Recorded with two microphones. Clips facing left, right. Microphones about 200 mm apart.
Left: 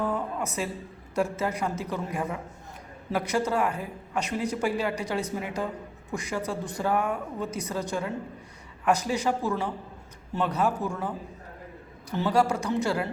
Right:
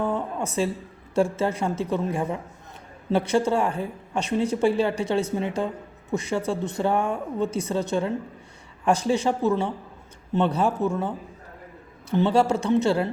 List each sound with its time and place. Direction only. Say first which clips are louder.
0.0 s a sound: right 3 dB; 25° right (ahead or behind)
1.1 s a woman's voice: right 5 dB; 25° right (ahead or behind)
12.1 s a woman's voice: right 4 dB; 25° right (ahead or behind)